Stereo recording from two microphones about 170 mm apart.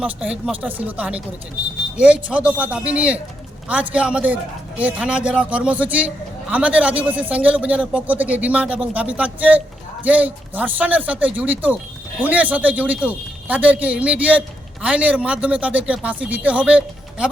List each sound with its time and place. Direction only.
0.0 s speech: 5° right (ahead or behind)